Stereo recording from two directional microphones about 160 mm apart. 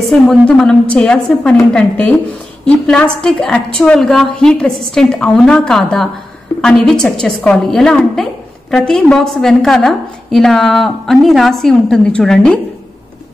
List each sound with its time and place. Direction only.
0.3 s a woman's voice: 5° left (ahead or behind)